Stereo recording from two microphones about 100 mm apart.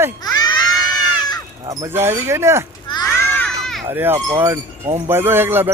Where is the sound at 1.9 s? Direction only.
25° right (ahead or behind).